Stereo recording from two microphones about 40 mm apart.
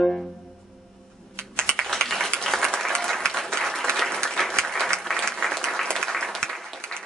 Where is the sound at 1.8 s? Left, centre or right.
Centre.